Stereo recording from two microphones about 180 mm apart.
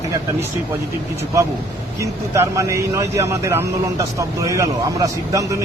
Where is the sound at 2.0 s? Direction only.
15° right (ahead or behind).